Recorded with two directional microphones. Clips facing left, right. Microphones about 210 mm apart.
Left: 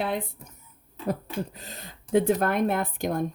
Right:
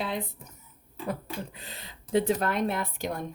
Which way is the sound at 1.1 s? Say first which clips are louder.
Left 5 dB; 40° left (ahead or behind).